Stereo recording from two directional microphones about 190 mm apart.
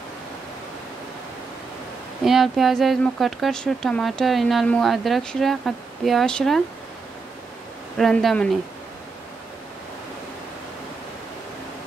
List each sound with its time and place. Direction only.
2.2 s speech: centre (ahead or behind)
8.0 s speech: centre (ahead or behind)